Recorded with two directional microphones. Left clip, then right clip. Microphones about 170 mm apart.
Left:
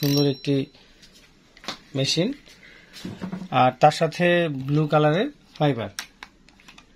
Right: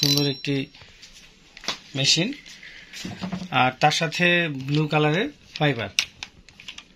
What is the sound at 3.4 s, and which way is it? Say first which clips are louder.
Speech: left 3 dB; 35° left (ahead or behind).